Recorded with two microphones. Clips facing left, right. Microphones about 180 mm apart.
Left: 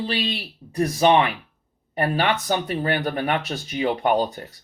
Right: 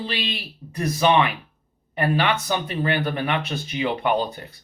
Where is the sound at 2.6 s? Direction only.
40° left (ahead or behind).